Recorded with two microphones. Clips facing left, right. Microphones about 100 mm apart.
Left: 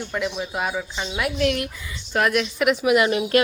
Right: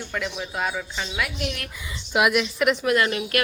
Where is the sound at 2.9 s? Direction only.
15° left (ahead or behind).